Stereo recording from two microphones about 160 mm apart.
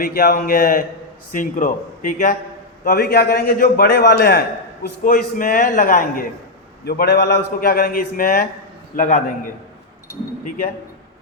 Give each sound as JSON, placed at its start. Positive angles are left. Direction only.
{"t": 0.0, "sound": "a man's voice", "side_deg": 65}
{"t": 2.8, "sound": "a man's voice", "side_deg": 70}
{"t": 6.8, "sound": "a man's voice", "side_deg": 85}
{"t": 9.0, "sound": "a man's voice", "side_deg": 50}